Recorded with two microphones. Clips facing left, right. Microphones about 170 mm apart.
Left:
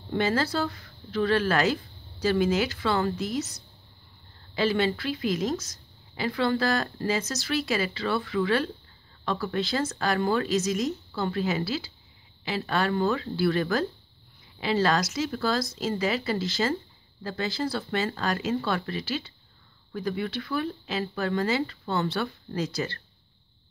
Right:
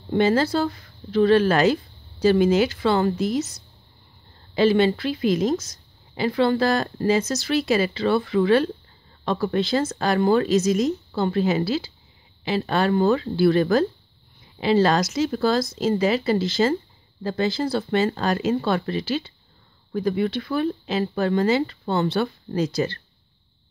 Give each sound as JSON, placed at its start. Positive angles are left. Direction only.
{"t": 0.1, "sound": "speech", "side_deg": -25}
{"t": 4.6, "sound": "speech", "side_deg": -25}